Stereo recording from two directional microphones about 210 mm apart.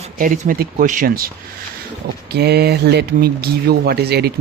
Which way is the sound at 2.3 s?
50° right (ahead or behind).